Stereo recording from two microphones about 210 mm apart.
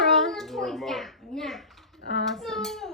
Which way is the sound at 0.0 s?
Centre (ahead or behind).